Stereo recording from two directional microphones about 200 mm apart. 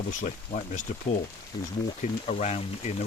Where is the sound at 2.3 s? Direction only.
35° left (ahead or behind).